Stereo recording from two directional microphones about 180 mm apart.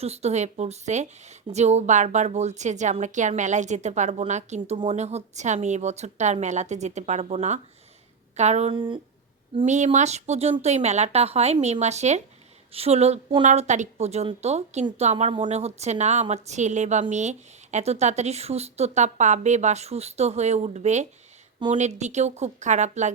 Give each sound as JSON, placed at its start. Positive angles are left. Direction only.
{"t": 0.0, "sound": "a woman's voice", "side_deg": -35}
{"t": 8.7, "sound": "speech", "side_deg": -25}
{"t": 9.6, "sound": "a woman's voice", "side_deg": -40}